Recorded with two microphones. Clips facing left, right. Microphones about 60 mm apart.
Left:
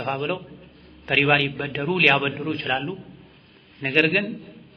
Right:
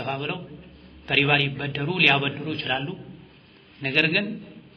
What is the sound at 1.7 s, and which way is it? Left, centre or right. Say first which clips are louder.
Speech: left 3 dB; centre.